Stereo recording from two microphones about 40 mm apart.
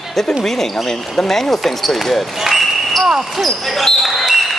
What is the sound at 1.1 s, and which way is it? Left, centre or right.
Speech, centre.